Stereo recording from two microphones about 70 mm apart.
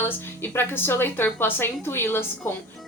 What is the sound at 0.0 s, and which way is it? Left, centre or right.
A woman's voice, left.